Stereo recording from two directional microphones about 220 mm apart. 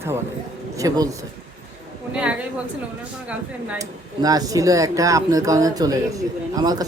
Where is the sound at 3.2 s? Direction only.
5° right (ahead or behind).